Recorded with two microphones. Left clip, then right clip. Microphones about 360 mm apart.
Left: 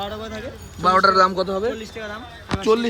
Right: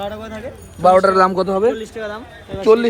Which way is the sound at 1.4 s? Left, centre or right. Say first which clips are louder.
Right 7 dB; right.